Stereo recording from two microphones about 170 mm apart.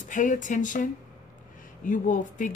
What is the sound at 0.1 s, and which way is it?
Speech, 50° left (ahead or behind).